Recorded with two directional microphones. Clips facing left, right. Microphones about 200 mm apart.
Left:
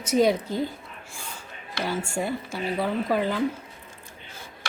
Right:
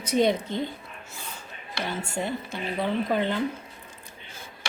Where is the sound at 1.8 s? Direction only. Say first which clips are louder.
Left 3 dB; 10° left (ahead or behind).